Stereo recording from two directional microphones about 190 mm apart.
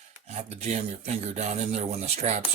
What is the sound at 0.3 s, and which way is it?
Speech, 35° right (ahead or behind).